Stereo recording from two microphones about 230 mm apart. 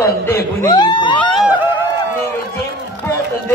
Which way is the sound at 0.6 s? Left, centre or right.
Centre.